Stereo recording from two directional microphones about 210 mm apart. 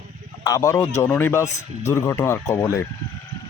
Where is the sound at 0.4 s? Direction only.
15° left (ahead or behind).